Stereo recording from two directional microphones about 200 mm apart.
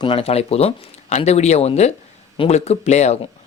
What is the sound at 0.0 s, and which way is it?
Speech, 30° left (ahead or behind).